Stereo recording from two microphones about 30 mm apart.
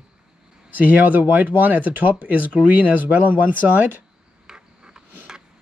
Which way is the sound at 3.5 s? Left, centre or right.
Right.